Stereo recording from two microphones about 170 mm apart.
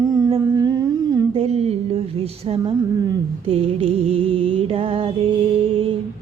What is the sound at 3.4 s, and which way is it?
Music, 40° right (ahead or behind).